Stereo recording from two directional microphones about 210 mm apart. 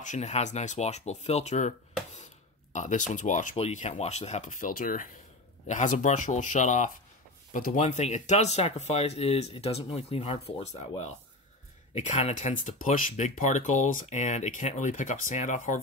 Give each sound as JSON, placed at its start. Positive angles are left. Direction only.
{"t": 0.0, "sound": "speech", "side_deg": 35}